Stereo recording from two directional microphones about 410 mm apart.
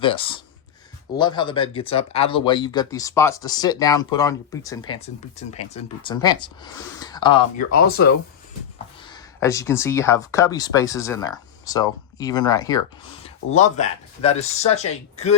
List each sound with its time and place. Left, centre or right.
0.0 s speech: centre
9.0 s speech: centre